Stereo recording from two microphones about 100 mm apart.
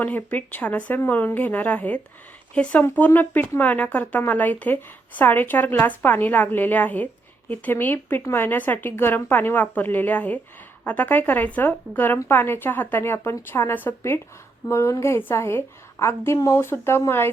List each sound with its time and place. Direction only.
0.0 s speech: 15° left (ahead or behind)